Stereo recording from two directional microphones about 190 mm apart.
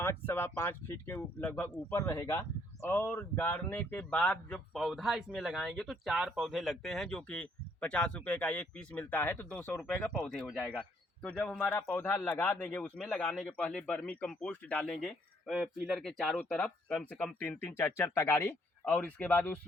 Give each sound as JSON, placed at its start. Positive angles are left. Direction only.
{"t": 0.0, "sound": "a man's voice", "side_deg": 10}